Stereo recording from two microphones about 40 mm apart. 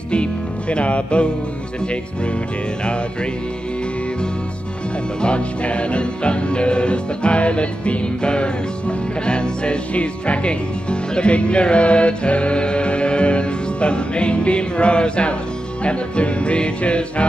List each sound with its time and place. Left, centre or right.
0.1 s music: left
5.2 s music: left